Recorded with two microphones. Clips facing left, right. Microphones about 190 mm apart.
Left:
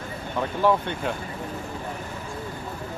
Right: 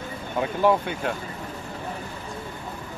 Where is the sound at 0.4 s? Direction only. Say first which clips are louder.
Right 1 dB; 10° right (ahead or behind).